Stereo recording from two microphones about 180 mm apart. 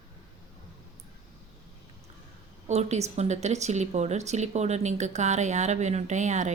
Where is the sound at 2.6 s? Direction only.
40° right (ahead or behind).